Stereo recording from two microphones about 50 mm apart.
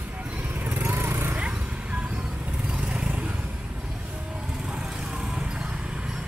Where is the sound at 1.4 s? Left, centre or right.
Right.